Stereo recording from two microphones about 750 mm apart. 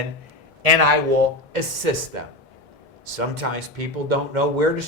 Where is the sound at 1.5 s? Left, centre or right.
Right.